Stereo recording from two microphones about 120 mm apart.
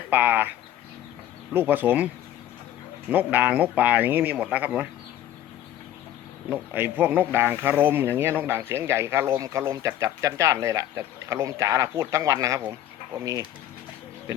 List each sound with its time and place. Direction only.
0.1 s speech: 15° right (ahead or behind)
1.5 s speech: 15° right (ahead or behind)
3.1 s speech: 15° right (ahead or behind)
6.5 s speech: 15° right (ahead or behind)